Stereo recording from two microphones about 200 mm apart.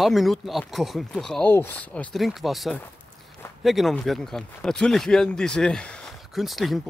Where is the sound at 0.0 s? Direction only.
Centre (ahead or behind).